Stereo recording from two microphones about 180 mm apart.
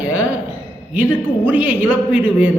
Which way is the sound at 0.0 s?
10° right (ahead or behind).